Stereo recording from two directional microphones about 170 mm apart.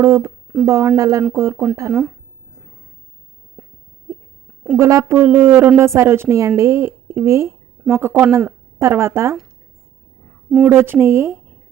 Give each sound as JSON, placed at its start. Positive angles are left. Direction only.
{"t": 0.0, "sound": "a woman's voice", "side_deg": -15}
{"t": 3.6, "sound": "a sound", "side_deg": -5}
{"t": 4.8, "sound": "a woman's voice", "side_deg": -15}
{"t": 10.7, "sound": "a woman's voice", "side_deg": -10}